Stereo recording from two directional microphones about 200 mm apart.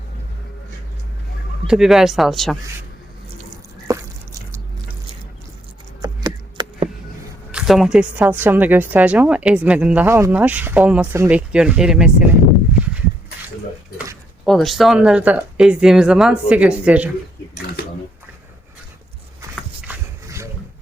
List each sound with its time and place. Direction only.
1.6 s speech: centre (ahead or behind)
3.9 s drip: 15° right (ahead or behind)
6.0 s a sound: 20° right (ahead or behind)
7.5 s speech: 5° right (ahead or behind)
14.4 s speech: centre (ahead or behind)
19.9 s a sound: 15° right (ahead or behind)